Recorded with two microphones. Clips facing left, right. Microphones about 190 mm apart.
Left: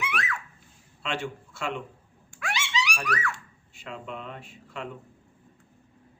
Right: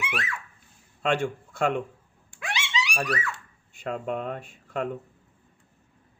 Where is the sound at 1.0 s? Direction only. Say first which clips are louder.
Right 7 dB; 50° right (ahead or behind).